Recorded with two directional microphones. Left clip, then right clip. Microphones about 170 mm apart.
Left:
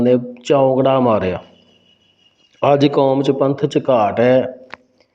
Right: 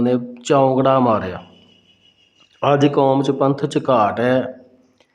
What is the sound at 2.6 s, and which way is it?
Speech, 20° left (ahead or behind).